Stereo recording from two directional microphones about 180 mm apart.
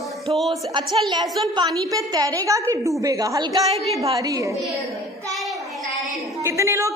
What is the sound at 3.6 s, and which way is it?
Speech, 35° right (ahead or behind).